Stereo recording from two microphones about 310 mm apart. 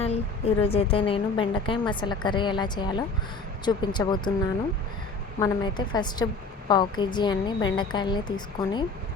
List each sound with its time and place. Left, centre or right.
0.0 s a woman's voice: centre
5.4 s a woman's voice: centre